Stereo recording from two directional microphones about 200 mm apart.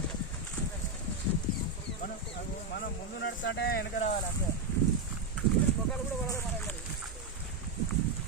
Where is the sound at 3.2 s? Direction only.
60° left (ahead or behind).